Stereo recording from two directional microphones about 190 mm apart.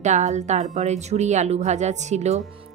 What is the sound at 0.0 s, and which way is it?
Speech, 40° right (ahead or behind).